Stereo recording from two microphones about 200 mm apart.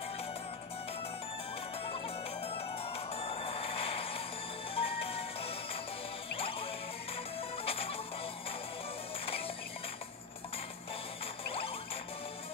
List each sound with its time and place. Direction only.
1.9 s music: 30° left (ahead or behind)
9.2 s music: 30° left (ahead or behind)
11.4 s music: 30° left (ahead or behind)